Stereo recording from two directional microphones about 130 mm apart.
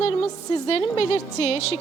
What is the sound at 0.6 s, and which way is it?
A woman's voice, 45° left (ahead or behind).